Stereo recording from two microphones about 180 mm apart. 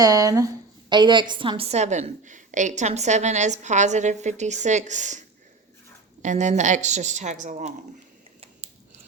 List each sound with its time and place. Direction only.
0.0 s a woman's voice: 20° right (ahead or behind); by 5.2 s 40° right (ahead or behind)
6.2 s a woman's voice: 40° right (ahead or behind)